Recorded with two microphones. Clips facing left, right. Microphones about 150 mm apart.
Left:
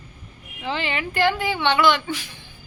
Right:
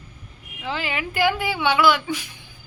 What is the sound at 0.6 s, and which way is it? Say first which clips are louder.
A woman's voice: left 1 dB; 5° right (ahead or behind).